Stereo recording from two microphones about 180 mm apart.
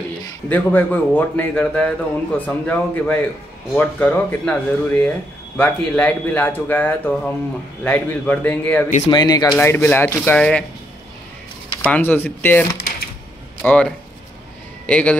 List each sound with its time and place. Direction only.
0.5 s a man's voice: 10° left (ahead or behind)
9.1 s speech: 20° left (ahead or behind)
9.5 s a man's voice: 10° left (ahead or behind)
11.8 s a man's voice: 10° left (ahead or behind)